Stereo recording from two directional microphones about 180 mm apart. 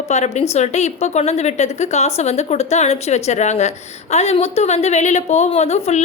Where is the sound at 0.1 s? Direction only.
40° left (ahead or behind).